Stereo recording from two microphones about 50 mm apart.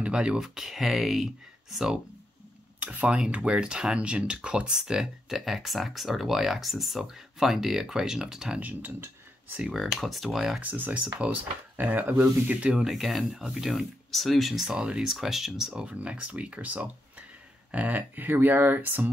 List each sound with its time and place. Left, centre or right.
0.0 s speech: centre
2.8 s speech: right
5.3 s speech: centre
8.5 s speech: right
9.8 s speech: centre
10.6 s speech: right
11.7 s speech: right
12.8 s speech: centre
14.8 s speech: centre
15.0 s speech: centre
15.7 s speech: right